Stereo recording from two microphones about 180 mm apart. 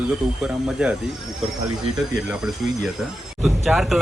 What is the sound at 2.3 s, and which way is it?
Speech, centre (ahead or behind).